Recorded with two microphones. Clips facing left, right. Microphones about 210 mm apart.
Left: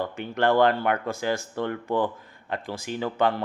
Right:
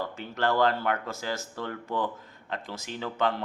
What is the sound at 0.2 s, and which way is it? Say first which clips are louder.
Speech: left 5 dB; 55° left (ahead or behind).